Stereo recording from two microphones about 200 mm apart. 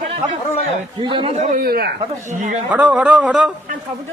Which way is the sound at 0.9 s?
25° right (ahead or behind).